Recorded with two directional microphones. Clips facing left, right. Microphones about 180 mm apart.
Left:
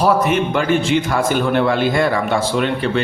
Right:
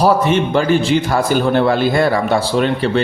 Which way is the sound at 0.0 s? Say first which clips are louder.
Right 2 dB; 30° right (ahead or behind).